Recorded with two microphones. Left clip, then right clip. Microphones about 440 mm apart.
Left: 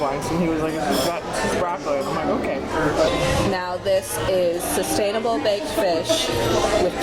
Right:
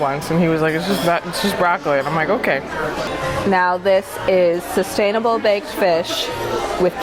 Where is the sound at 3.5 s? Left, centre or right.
Right.